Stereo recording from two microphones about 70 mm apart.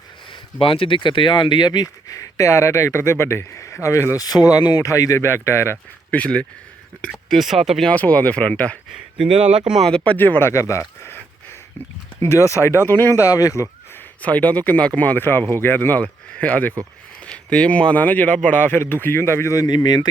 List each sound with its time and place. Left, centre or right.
1.4 s speech: left
4.2 s speech: left
4.8 s speech: left
6.1 s speech: centre
7.3 s speech: centre
7.9 s speech: left
8.9 s speech: centre
10.0 s speech: left
10.5 s speech: left
12.2 s speech: left
13.1 s speech: left
14.2 s speech: left
19.6 s speech: left